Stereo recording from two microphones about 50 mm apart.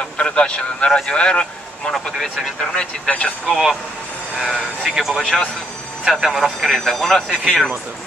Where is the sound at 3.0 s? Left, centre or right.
Left.